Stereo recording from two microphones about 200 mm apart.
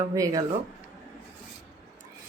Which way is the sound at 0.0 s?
15° right (ahead or behind).